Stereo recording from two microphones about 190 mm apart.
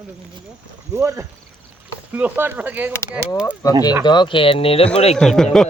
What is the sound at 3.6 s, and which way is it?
Speech, 20° left (ahead or behind).